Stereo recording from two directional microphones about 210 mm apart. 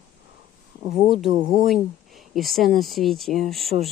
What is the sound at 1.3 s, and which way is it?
Speech, 25° right (ahead or behind).